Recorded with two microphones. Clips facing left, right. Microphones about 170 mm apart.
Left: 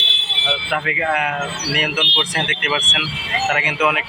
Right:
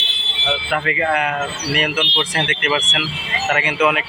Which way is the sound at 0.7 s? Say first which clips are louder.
Right 2 dB; 5° left (ahead or behind).